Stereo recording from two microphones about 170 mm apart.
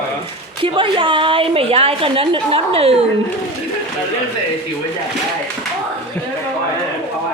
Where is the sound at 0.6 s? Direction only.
30° right (ahead or behind).